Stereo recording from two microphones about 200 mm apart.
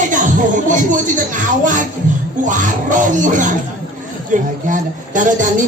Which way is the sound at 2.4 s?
40° right (ahead or behind).